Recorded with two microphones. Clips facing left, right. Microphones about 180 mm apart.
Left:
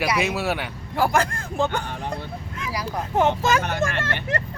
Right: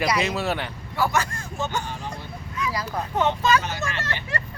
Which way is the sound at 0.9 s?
55° left (ahead or behind).